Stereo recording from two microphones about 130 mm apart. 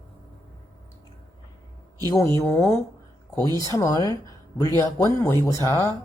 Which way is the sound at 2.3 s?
20° left (ahead or behind).